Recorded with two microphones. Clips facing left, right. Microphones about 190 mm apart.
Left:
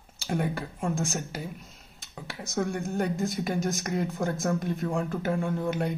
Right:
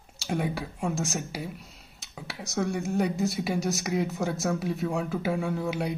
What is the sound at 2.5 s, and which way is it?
A woman's voice, centre (ahead or behind).